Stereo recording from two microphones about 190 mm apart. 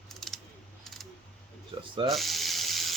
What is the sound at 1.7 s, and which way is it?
Rub, 30° right (ahead or behind).